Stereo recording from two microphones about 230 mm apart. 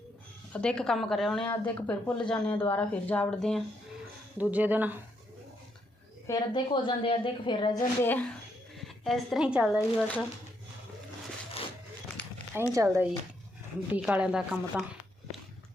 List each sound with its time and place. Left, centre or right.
0.5 s a woman's voice: centre
6.2 s a woman's voice: centre
12.5 s a woman's voice: centre